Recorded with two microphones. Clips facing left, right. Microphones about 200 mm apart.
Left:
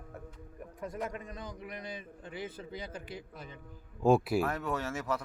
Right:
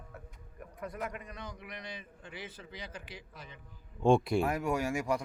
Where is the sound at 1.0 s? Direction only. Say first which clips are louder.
Left 3 dB; 30° left (ahead or behind).